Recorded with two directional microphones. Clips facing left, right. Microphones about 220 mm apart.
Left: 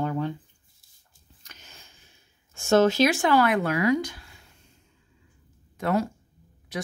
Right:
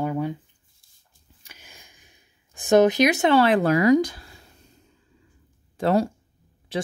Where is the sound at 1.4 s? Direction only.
10° right (ahead or behind); by 4.7 s 35° right (ahead or behind).